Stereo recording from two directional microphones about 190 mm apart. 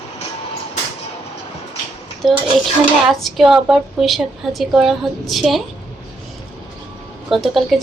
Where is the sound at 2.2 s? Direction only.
Centre (ahead or behind).